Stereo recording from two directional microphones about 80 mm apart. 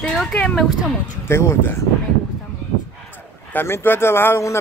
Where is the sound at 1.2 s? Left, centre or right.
Left.